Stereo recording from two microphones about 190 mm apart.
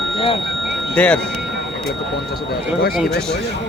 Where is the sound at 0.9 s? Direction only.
5° left (ahead or behind).